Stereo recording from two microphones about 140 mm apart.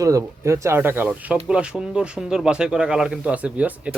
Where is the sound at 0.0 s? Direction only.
25° right (ahead or behind).